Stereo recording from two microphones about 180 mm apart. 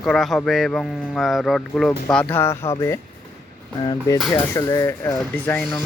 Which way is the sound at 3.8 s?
25° left (ahead or behind).